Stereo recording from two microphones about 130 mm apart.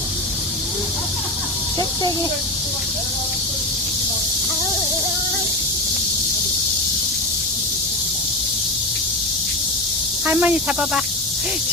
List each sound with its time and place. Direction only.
10.2 s speech: 15° right (ahead or behind)